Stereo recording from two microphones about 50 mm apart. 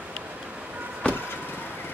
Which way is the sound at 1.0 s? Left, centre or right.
Left.